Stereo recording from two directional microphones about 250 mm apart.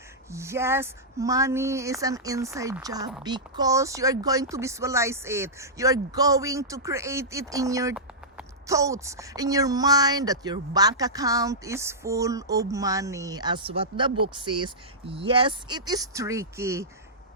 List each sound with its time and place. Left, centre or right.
0.3 s speech: centre